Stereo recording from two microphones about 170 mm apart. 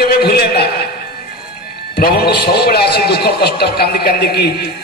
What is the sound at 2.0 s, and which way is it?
A man's voice, 70° left (ahead or behind).